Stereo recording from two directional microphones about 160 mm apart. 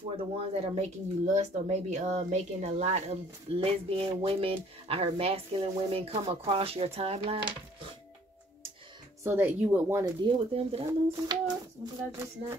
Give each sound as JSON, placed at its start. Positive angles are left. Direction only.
{"t": 0.2, "sound": "speech", "side_deg": -40}
{"t": 9.2, "sound": "speech", "side_deg": -10}
{"t": 10.2, "sound": "speech", "side_deg": -35}
{"t": 10.9, "sound": "speech", "side_deg": -25}